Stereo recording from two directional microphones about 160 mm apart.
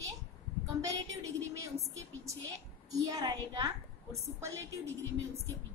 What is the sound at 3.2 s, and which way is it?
Speech, 25° right (ahead or behind).